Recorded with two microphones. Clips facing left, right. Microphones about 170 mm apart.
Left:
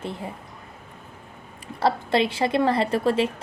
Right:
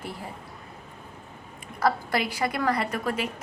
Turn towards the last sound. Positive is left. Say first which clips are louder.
# left 7 dB
turn(degrees=30)  # may be behind; listen again after turning